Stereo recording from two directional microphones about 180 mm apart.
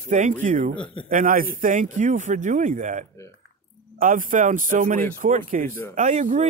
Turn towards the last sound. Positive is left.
turn(degrees=-40)  # may be behind; listen again after turning